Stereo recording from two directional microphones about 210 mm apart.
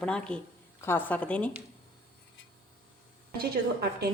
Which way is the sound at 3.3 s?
50° right (ahead or behind).